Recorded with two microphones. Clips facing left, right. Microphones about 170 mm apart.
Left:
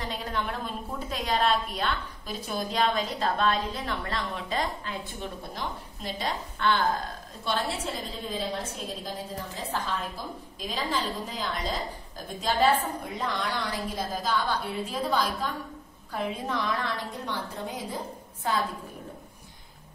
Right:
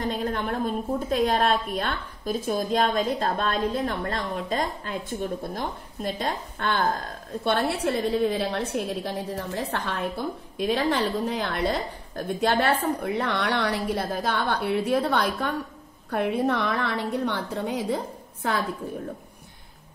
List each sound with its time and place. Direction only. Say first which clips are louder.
0.0 s a woman's voice: right 5 dB; 50° right (ahead or behind); by 18.6 s 65° right (ahead or behind)